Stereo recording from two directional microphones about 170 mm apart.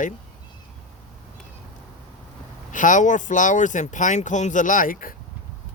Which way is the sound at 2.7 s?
50° left (ahead or behind).